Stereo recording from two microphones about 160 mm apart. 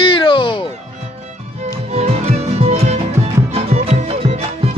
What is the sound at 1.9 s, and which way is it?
Music, 40° right (ahead or behind).